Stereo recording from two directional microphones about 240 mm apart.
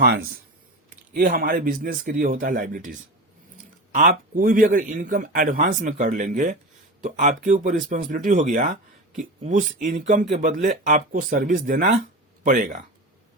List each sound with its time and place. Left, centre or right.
0.0 s speech: right
3.9 s speech: right